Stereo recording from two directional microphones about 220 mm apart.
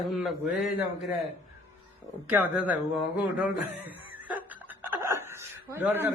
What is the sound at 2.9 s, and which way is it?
Chuckle, 5° right (ahead or behind).